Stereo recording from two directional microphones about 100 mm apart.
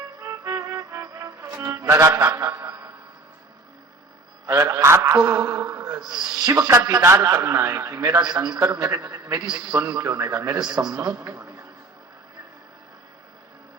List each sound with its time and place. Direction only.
0.2 s music: 30° right (ahead or behind)
4.4 s a man's voice: 25° right (ahead or behind)
6.1 s a man's voice: 45° right (ahead or behind)
6.7 s a man's voice: 35° right (ahead or behind)
8.2 s a man's voice: 40° right (ahead or behind)
8.5 s a man's voice: 30° right (ahead or behind)